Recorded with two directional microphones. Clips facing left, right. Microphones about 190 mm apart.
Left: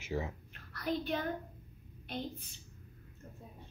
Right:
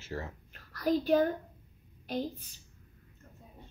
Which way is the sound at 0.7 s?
35° right (ahead or behind).